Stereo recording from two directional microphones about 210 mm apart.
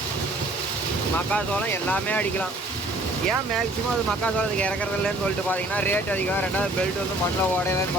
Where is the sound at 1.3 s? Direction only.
5° left (ahead or behind).